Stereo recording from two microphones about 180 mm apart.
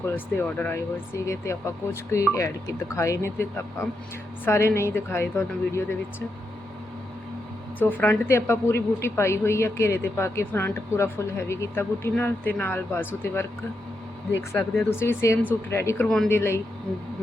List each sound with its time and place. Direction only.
0.1 s a woman's voice: 10° left (ahead or behind)
7.8 s a woman's voice: 10° left (ahead or behind)
14.8 s a woman's voice: 15° left (ahead or behind)
16.0 s speech: centre (ahead or behind)
16.3 s a woman's voice: 15° left (ahead or behind)